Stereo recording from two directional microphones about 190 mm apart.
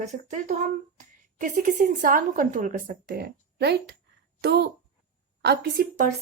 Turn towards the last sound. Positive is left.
turn(degrees=-50)  # may be behind; listen again after turning